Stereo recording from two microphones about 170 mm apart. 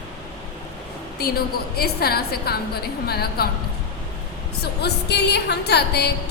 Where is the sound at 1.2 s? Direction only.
65° left (ahead or behind).